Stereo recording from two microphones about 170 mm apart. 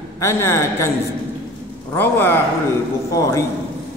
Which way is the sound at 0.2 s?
15° left (ahead or behind).